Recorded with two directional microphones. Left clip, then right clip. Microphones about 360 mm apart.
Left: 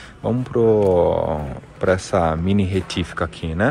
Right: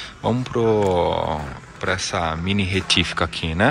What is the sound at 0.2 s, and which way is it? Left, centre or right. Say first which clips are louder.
Speech: left 2 dB; centre.